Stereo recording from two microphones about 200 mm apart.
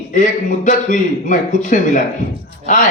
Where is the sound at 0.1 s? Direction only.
40° left (ahead or behind).